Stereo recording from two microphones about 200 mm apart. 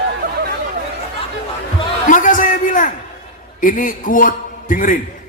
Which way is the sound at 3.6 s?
45° left (ahead or behind).